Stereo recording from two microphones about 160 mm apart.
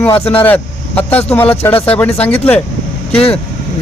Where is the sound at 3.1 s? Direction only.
35° left (ahead or behind).